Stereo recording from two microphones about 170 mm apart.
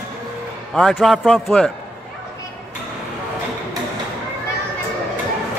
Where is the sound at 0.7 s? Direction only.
5° left (ahead or behind).